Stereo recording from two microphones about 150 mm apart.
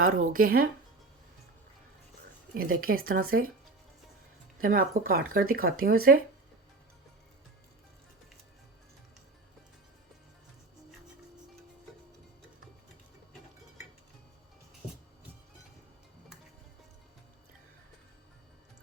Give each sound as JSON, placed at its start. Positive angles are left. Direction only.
{"t": 0.0, "sound": "speech", "side_deg": -60}
{"t": 2.6, "sound": "speech", "side_deg": -75}
{"t": 4.6, "sound": "speech", "side_deg": -70}